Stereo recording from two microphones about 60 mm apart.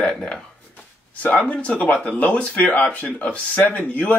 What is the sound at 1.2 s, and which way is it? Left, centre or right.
Speech, left.